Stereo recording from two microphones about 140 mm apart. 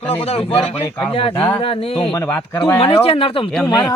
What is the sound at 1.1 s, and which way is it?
Speech, 40° left (ahead or behind).